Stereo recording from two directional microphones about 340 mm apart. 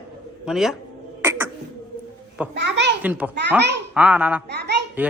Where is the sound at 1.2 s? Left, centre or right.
Centre.